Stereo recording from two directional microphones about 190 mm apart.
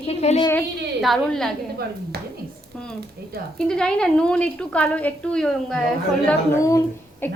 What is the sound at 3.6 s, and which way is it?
A woman's voice, 5° left (ahead or behind).